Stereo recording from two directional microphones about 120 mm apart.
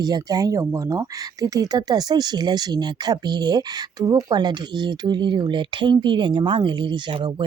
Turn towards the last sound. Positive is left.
turn(degrees=-40)  # may be behind; listen again after turning